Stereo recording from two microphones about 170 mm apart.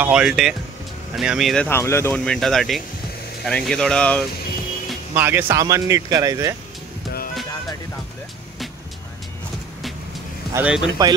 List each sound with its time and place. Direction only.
0.0 s speech: 5° right (ahead or behind)
1.7 s speech: 15° left (ahead or behind)
5.1 s speech: 10° right (ahead or behind)
10.5 s speech: 5° right (ahead or behind)
11.0 s speech: 20° right (ahead or behind)